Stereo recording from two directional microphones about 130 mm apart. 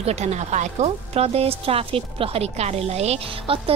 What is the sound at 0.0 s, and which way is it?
Speech, 55° right (ahead or behind).